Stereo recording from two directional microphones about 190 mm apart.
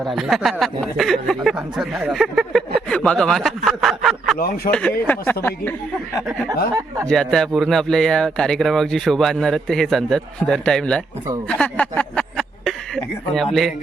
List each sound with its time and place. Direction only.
0.0 s speech: centre (ahead or behind)
4.4 s a man's voice: 50° left (ahead or behind)
4.7 s speech: 5° left (ahead or behind)
7.1 s speech: 5° left (ahead or behind)